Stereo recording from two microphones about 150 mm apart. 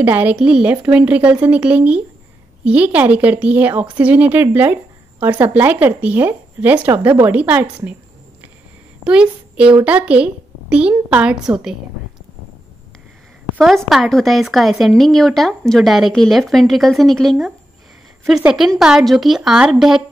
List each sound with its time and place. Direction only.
0.0 s a woman's voice: 10° right (ahead or behind)
9.0 s a woman's voice: 5° right (ahead or behind)
13.6 s speech: centre (ahead or behind)